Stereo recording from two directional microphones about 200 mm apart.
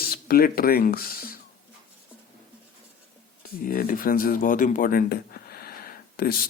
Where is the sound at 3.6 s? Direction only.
45° left (ahead or behind).